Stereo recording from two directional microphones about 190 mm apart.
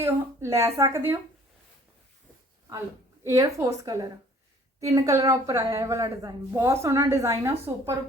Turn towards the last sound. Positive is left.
turn(degrees=-15)  # may be behind; listen again after turning